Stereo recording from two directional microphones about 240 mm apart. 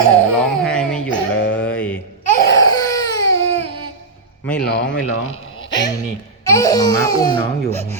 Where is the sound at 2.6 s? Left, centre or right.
Centre.